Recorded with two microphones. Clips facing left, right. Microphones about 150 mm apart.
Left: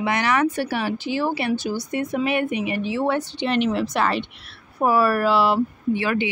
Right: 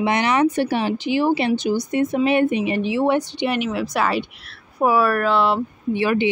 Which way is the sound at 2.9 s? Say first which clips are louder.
Right 4 dB; 15° right (ahead or behind).